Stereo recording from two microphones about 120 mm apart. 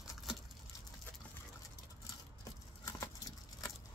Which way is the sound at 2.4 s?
30° left (ahead or behind).